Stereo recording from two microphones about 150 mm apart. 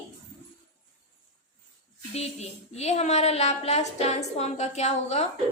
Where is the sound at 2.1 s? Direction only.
45° left (ahead or behind).